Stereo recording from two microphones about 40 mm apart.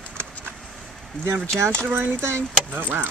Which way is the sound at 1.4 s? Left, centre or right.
Left.